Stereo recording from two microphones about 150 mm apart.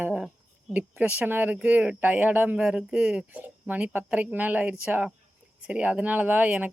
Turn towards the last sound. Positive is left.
turn(degrees=-10)  # may be behind; listen again after turning